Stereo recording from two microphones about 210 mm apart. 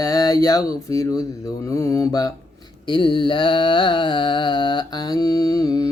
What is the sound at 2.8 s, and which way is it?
Music, 25° left (ahead or behind).